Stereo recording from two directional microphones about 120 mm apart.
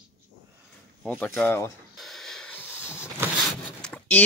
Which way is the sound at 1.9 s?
Centre (ahead or behind).